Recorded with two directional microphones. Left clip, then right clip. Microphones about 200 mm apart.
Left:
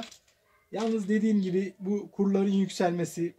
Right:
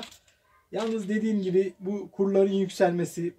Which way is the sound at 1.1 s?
35° left (ahead or behind).